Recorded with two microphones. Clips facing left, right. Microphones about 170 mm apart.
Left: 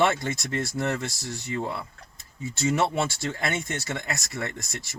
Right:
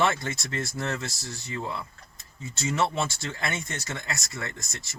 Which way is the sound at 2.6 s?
20° left (ahead or behind).